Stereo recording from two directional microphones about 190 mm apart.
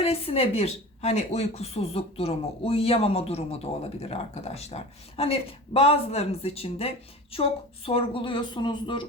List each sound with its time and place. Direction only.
0.0 s a woman's voice: 30° left (ahead or behind)